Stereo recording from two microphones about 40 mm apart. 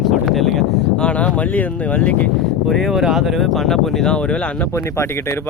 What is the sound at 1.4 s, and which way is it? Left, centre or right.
Speech, left.